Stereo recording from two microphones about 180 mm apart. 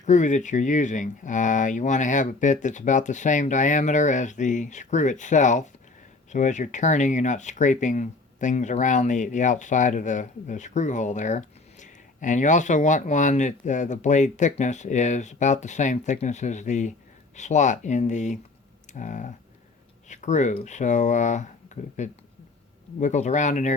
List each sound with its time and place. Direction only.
0.0 s speech: 45° left (ahead or behind)
23.0 s speech: 40° left (ahead or behind)